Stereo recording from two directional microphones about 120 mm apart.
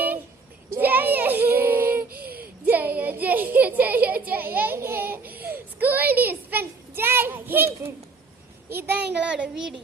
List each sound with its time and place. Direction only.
0.8 s child singing: 15° right (ahead or behind)
8.7 s a child's voice: 15° right (ahead or behind)